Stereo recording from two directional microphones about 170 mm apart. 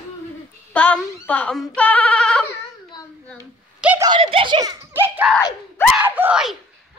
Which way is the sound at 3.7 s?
10° right (ahead or behind).